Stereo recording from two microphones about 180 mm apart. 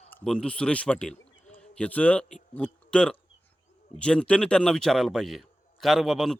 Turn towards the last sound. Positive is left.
turn(degrees=0)  # may be behind; listen again after turning